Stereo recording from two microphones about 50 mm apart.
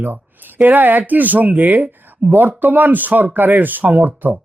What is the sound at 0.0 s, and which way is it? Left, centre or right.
Speech, right.